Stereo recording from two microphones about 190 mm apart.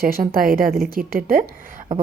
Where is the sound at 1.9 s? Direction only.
45° right (ahead or behind).